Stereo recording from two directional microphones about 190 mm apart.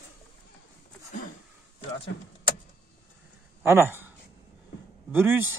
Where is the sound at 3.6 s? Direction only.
10° right (ahead or behind).